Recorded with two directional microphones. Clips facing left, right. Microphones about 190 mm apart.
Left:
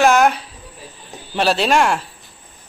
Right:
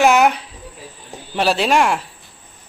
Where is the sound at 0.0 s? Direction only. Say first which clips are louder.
Even; 10° right (ahead or behind).